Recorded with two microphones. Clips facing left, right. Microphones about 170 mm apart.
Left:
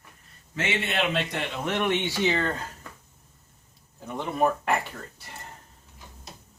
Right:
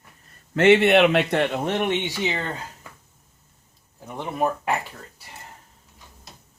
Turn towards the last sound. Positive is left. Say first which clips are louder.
# even
turn(degrees=-10)  # may be behind; listen again after turning